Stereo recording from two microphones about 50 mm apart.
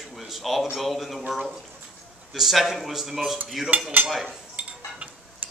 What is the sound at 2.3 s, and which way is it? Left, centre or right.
Speech, centre.